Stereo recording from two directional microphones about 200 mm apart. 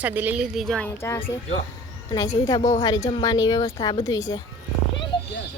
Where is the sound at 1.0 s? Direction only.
15° left (ahead or behind).